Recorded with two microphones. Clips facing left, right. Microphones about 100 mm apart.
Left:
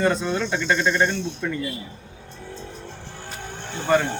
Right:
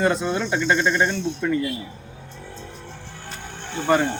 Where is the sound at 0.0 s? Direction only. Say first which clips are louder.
Even; 15° right (ahead or behind).